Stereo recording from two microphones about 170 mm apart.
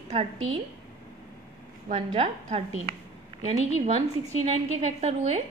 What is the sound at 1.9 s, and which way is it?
A woman's voice, 35° right (ahead or behind).